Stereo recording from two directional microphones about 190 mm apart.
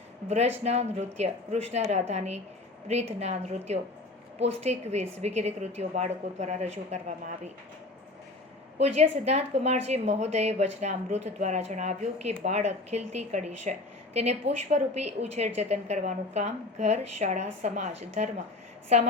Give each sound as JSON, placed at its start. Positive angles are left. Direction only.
{"t": 0.3, "sound": "speech", "side_deg": -35}
{"t": 8.8, "sound": "speech", "side_deg": -35}